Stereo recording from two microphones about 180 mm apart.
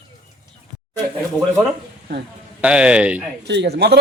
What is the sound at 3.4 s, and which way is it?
Speech, 70° right (ahead or behind).